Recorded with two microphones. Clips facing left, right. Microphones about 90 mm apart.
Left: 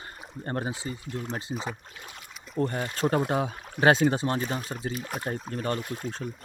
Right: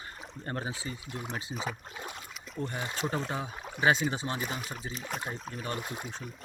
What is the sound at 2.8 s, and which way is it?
Speech, 20° right (ahead or behind).